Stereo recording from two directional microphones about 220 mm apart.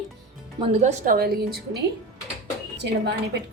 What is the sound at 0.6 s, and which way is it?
Speech, 30° right (ahead or behind).